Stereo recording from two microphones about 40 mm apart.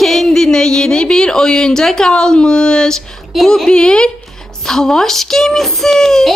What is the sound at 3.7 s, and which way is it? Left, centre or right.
Speech, left.